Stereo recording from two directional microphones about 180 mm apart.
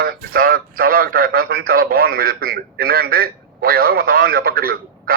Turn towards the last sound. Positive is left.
turn(degrees=-55)  # may be behind; listen again after turning